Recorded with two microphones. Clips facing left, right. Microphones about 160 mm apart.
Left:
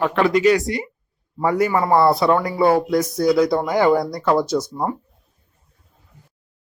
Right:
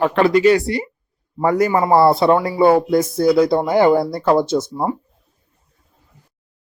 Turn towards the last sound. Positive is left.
turn(degrees=-10)  # may be behind; listen again after turning